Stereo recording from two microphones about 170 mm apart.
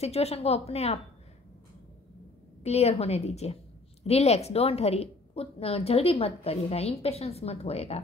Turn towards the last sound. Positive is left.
turn(degrees=40)  # may be behind; listen again after turning